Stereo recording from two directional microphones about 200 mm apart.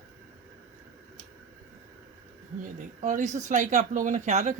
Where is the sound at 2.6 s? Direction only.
40° right (ahead or behind).